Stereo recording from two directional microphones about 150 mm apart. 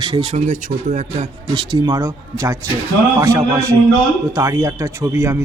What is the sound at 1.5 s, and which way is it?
Speech, 30° right (ahead or behind).